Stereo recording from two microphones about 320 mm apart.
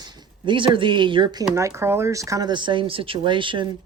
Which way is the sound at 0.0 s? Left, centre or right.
Centre.